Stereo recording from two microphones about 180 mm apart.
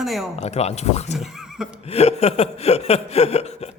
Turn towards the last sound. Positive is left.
turn(degrees=35)  # may be behind; listen again after turning